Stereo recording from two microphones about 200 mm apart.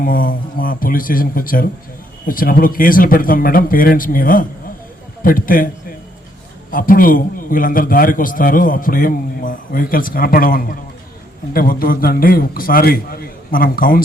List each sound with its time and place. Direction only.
0.0 s a man's voice: 45° left (ahead or behind)
6.7 s a man's voice: 45° left (ahead or behind)